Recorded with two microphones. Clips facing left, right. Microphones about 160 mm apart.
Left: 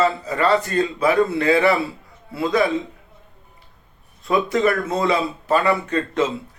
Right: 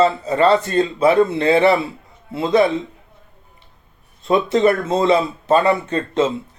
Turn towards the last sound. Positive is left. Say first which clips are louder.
# right 2 dB
turn(degrees=-20)  # may be behind; listen again after turning